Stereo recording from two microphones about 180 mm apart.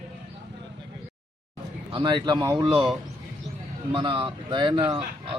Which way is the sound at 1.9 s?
25° right (ahead or behind).